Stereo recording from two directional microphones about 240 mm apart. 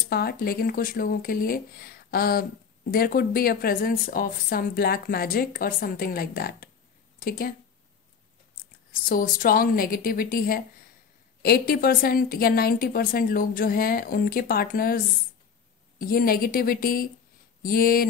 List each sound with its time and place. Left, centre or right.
0.1 s speech: left
9.1 s speech: left
16.0 s speech: left